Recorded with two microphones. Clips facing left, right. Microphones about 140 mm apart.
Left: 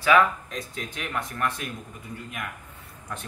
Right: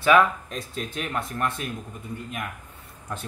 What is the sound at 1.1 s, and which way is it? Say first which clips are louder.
Speech: left 1 dB; 25° right (ahead or behind).